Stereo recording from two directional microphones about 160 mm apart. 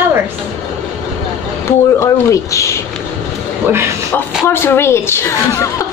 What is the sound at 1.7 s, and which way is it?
Speech, 20° left (ahead or behind).